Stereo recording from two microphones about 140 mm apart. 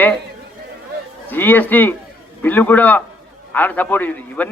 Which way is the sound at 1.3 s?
15° left (ahead or behind).